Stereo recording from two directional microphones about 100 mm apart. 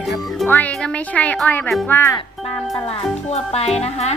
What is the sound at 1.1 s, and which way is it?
A woman's voice, 15° left (ahead or behind).